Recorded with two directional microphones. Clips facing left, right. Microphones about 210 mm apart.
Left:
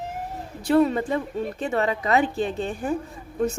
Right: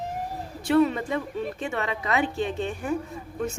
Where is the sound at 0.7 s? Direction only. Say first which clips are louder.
Left 2 dB; 35° left (ahead or behind).